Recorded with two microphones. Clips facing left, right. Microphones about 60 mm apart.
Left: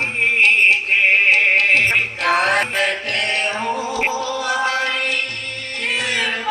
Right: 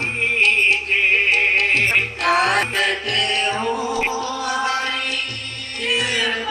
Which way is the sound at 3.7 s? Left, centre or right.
Right.